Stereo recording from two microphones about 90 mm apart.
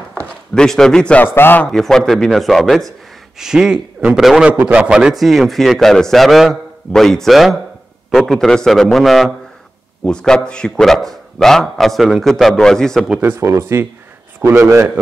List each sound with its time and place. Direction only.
0.2 s speech: 5° left (ahead or behind)
1.2 s a man's voice: 25° left (ahead or behind)
1.7 s a man's voice: 5° left (ahead or behind)
4.5 s speech: 20° right (ahead or behind); by 13.1 s 5° left (ahead or behind)
13.2 s a man's voice: 25° right (ahead or behind)